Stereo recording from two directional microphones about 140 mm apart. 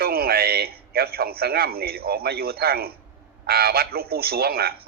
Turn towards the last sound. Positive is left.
turn(degrees=-90)